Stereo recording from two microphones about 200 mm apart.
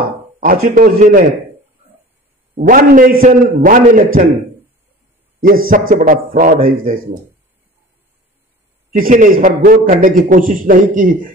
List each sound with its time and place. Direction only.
0.4 s a man's voice: 45° right (ahead or behind)
2.5 s a man's voice: 45° right (ahead or behind)
5.7 s a man's voice: 40° right (ahead or behind)
8.9 s a man's voice: 40° right (ahead or behind)